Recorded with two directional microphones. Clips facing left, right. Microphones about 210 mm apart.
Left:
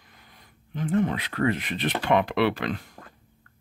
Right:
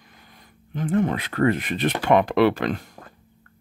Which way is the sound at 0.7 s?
50° right (ahead or behind).